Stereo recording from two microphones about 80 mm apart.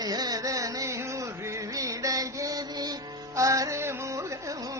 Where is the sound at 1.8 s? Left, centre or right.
Right.